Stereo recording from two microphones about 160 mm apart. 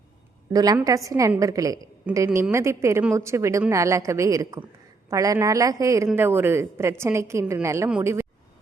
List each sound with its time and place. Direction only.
0.5 s a woman's voice: 25° right (ahead or behind)